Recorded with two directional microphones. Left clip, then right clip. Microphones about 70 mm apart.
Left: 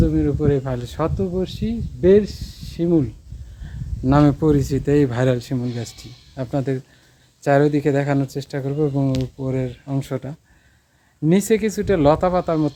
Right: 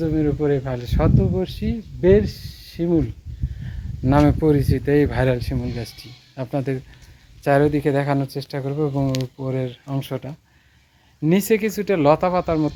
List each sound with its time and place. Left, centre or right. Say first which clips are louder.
0.0 s speech: left 1 dB; left
1.5 s speech: left 1 dB; left
4.1 s speech: left 1 dB; left; by 9.0 s centre
9.5 s speech: even; centre
10.0 s speech: left 1 dB; left
11.2 s speech: left 1 dB; centre